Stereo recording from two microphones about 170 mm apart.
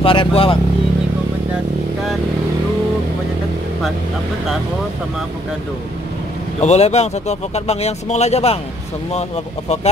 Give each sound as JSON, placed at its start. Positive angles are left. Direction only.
{"t": 0.0, "sound": "speech", "side_deg": 30}
{"t": 6.6, "sound": "speech", "side_deg": 40}